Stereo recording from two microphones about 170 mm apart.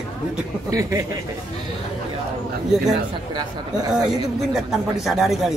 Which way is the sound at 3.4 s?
20° right (ahead or behind).